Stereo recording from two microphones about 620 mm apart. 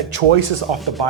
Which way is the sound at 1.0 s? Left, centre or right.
Right.